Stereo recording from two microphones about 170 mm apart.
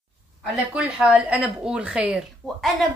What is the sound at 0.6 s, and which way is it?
Speech, 5° right (ahead or behind).